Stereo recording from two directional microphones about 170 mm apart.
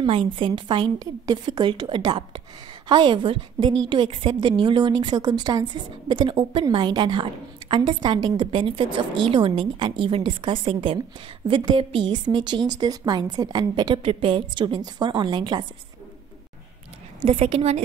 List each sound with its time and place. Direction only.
0.0 s a woman's voice: 30° right (ahead or behind)
17.2 s a woman's voice: 35° right (ahead or behind)